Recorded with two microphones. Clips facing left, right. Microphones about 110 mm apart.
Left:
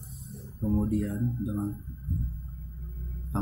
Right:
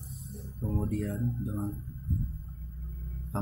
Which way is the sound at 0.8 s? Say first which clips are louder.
Left 3 dB; centre (ahead or behind).